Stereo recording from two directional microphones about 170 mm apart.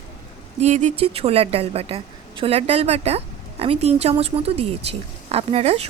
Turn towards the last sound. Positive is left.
turn(degrees=-40)  # may be behind; listen again after turning